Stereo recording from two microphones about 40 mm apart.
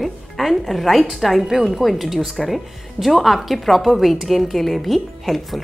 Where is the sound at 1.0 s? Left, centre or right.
Centre.